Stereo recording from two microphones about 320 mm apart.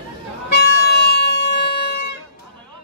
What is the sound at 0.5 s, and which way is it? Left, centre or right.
Music, left.